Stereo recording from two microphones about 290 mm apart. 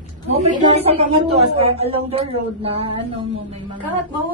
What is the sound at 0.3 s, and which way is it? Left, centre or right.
A woman's voice, right.